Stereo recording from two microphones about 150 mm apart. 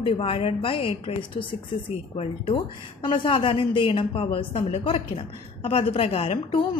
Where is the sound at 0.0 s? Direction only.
40° left (ahead or behind).